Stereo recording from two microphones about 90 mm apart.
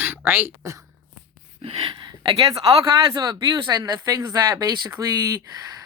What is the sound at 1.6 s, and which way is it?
Speech, 65° right (ahead or behind).